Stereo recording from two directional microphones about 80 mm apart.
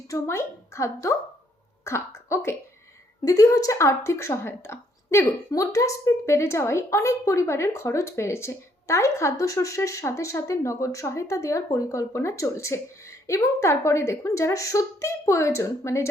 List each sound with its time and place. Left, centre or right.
0.1 s speech: left